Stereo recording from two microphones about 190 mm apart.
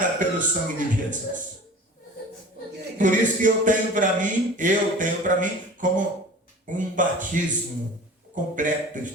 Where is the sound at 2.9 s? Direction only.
45° right (ahead or behind).